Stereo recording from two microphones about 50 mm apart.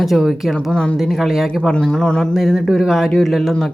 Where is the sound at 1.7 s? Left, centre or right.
Centre.